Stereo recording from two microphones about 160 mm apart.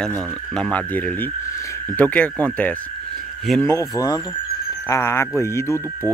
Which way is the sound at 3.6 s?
20° left (ahead or behind).